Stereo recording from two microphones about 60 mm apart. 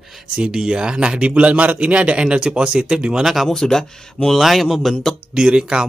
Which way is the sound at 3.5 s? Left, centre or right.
Centre.